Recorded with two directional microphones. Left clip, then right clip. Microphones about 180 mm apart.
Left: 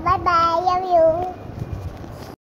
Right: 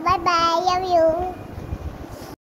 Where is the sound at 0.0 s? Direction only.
25° right (ahead or behind).